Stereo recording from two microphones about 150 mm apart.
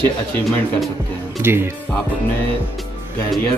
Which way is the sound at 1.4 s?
15° right (ahead or behind).